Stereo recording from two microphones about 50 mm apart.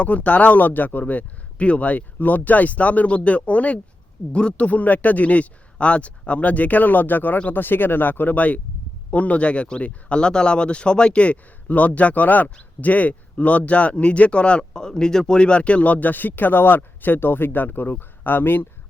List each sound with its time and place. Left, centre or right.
0.0 s speech: left